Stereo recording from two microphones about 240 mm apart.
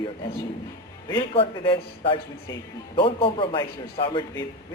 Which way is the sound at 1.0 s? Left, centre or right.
Centre.